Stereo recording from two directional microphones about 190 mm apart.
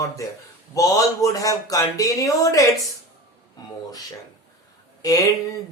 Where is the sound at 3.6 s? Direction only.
20° left (ahead or behind).